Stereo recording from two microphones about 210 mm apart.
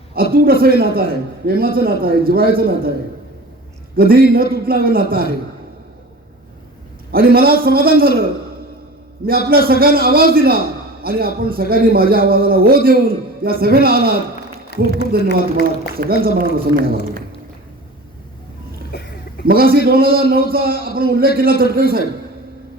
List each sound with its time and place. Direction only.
0.1 s a man's voice: 45° right (ahead or behind)
3.9 s a man's voice: 45° right (ahead or behind)
7.1 s a man's voice: 45° right (ahead or behind)
9.2 s a man's voice: 45° right (ahead or behind)
14.7 s a man's voice: 50° left (ahead or behind)
15.1 s a man's voice: 45° right (ahead or behind)
18.9 s a sound: 50° left (ahead or behind)
19.5 s a man's voice: 45° right (ahead or behind)